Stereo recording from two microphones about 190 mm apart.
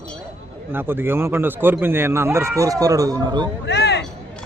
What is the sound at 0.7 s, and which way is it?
Speech, 10° right (ahead or behind).